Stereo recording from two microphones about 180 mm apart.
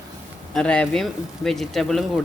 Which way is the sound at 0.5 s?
5° left (ahead or behind).